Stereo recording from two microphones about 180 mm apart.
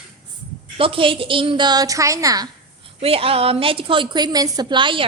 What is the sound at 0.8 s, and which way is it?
A woman's voice, 30° right (ahead or behind).